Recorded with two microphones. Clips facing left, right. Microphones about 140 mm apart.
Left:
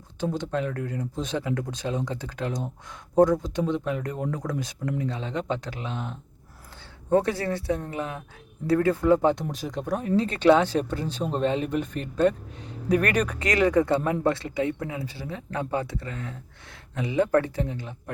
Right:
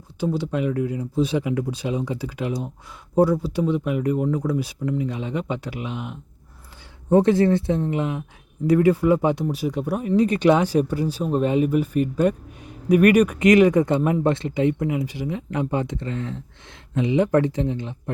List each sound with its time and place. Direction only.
0.2 s speech: 10° right (ahead or behind)